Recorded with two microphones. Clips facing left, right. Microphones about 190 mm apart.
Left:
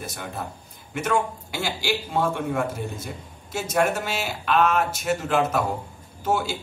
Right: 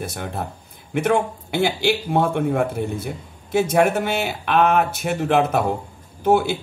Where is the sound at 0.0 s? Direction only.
55° right (ahead or behind).